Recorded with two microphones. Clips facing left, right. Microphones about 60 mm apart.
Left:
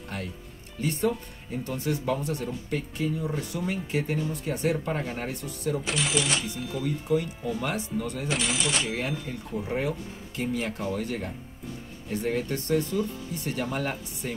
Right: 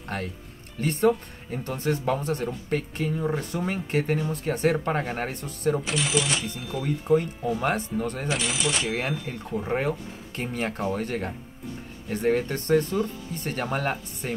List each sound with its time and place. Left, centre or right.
0.1 s speech: right
5.9 s speech: centre
6.8 s speech: right
8.3 s speech: centre
9.3 s speech: right